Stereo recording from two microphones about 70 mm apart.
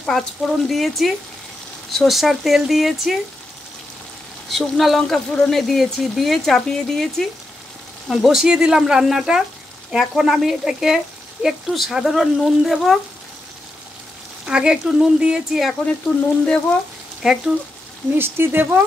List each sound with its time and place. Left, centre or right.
0.0 s speech: centre
4.5 s speech: centre
14.4 s speech: centre
17.2 s speech: centre
18.1 s speech: right